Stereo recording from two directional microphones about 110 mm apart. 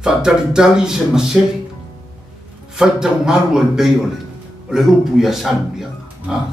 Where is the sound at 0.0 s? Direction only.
5° right (ahead or behind).